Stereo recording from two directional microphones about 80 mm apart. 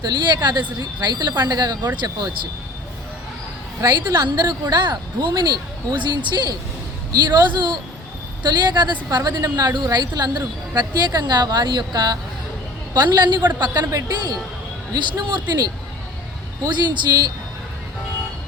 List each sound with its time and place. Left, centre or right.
0.0 s a woman's voice: right
2.0 s speech: right
3.8 s a woman's voice: right
13.8 s a woman's voice: right
15.2 s a woman's voice: right